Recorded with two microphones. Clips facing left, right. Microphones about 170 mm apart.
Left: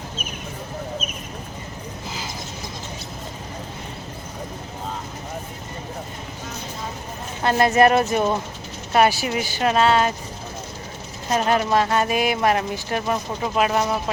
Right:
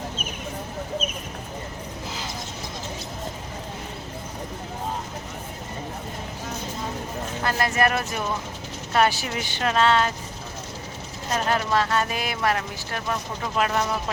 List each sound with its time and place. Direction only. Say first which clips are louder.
7.4 s speech: left 7 dB; 25° left (ahead or behind)
8.9 s speech: left 4 dB; 10° left (ahead or behind)
11.3 s speech: left 4 dB; 15° left (ahead or behind)